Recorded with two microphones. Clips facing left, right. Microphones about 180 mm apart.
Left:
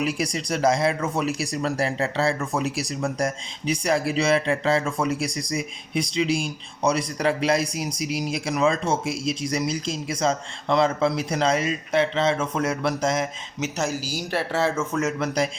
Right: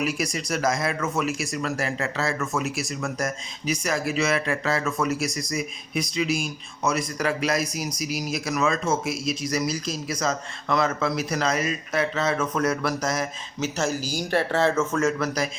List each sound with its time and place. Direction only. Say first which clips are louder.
0.0 s speech: left 1 dB; 30° left (ahead or behind)